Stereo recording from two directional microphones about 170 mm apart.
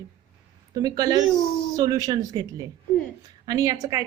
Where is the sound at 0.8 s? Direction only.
25° right (ahead or behind).